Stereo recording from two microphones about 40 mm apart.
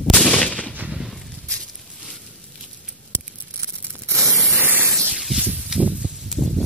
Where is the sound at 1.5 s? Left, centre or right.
Centre.